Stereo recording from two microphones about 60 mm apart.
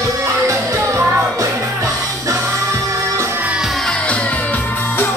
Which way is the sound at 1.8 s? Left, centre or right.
Right.